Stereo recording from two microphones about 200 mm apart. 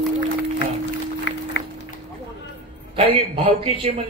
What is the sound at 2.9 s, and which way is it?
Speech, 30° right (ahead or behind).